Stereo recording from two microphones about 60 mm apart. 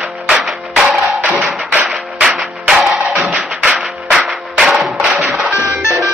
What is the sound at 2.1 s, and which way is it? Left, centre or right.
Music, centre.